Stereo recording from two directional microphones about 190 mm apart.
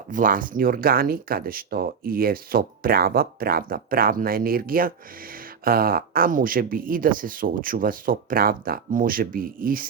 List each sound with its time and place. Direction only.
0.1 s speech: 45° right (ahead or behind)